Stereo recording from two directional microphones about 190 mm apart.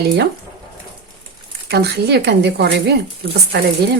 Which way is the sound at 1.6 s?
60° right (ahead or behind).